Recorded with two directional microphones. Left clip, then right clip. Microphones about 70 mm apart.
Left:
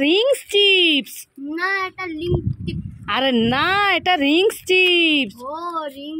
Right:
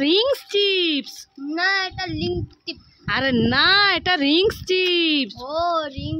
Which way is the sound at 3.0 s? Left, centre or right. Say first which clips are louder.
Left 2 dB; left.